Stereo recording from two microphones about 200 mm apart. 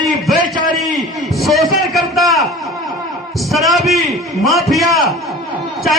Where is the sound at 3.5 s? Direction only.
Centre (ahead or behind).